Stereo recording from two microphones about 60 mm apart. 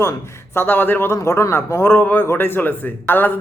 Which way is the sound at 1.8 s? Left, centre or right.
Left.